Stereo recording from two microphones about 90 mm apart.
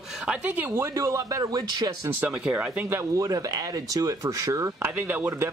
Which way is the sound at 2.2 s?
20° right (ahead or behind).